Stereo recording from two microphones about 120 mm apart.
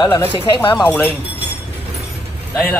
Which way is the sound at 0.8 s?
15° left (ahead or behind).